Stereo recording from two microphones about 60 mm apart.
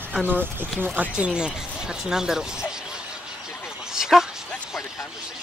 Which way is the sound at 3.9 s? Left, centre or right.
Centre.